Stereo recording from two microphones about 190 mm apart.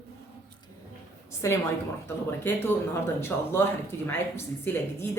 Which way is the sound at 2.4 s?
10° left (ahead or behind).